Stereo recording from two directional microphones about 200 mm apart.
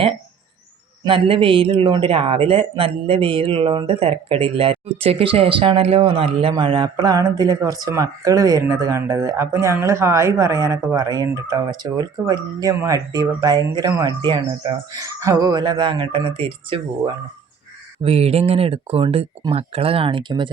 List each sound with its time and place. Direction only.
1.0 s a man's voice: 25° right (ahead or behind)